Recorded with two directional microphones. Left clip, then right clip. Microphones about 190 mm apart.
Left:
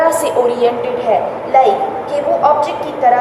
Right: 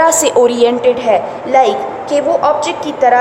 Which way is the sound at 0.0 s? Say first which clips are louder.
Right 3 dB; 55° right (ahead or behind).